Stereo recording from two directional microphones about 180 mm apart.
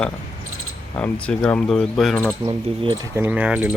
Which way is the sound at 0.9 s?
5° left (ahead or behind).